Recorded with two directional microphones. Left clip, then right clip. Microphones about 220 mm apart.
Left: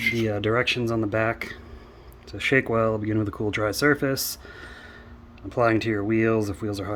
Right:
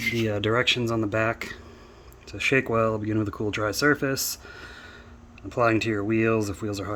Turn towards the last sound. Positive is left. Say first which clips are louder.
# left 1 dB
turn(degrees=-5)  # may be behind; listen again after turning